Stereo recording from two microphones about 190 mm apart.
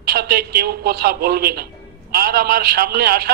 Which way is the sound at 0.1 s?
55° right (ahead or behind).